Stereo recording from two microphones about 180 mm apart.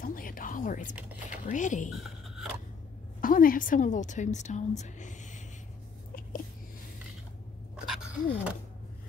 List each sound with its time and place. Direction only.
0.0 s speech: 50° left (ahead or behind)
1.9 s speech: centre (ahead or behind)
3.2 s a woman's voice: 50° left (ahead or behind)
7.7 s a sound: 5° right (ahead or behind)